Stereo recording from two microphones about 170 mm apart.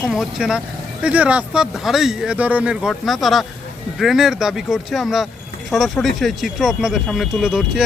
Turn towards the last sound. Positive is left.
turn(degrees=-5)  # may be behind; listen again after turning